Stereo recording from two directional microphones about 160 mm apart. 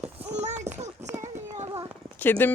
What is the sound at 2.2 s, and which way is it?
Speech, 10° left (ahead or behind).